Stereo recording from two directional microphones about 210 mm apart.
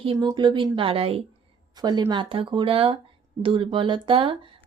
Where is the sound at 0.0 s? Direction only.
25° right (ahead or behind).